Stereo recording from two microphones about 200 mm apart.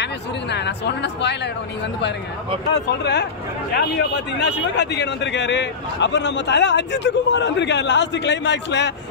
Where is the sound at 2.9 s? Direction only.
55° left (ahead or behind).